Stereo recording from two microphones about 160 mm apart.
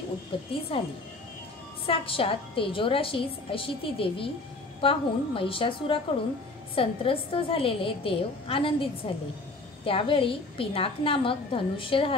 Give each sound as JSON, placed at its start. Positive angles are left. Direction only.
{"t": 0.3, "sound": "a woman's voice", "side_deg": 35}